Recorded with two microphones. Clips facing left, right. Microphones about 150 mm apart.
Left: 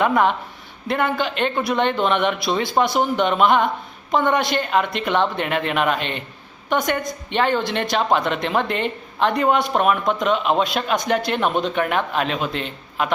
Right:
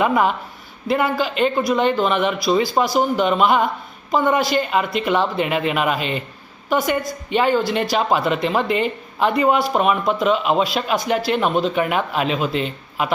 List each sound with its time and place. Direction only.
0.0 s speech: 5° right (ahead or behind)